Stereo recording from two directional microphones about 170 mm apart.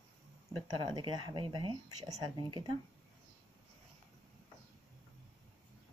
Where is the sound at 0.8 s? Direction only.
25° right (ahead or behind).